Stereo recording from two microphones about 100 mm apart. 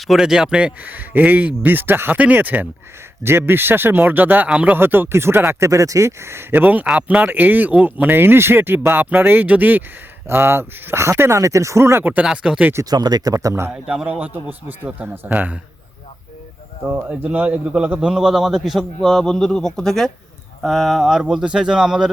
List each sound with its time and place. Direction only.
0.1 s speech: 5° right (ahead or behind); by 12.2 s 20° right (ahead or behind)
12.2 s speech: 10° right (ahead or behind)
12.7 s speech: 40° right (ahead or behind)
13.7 s speech: 10° right (ahead or behind)
16.9 s a man's voice: 20° right (ahead or behind)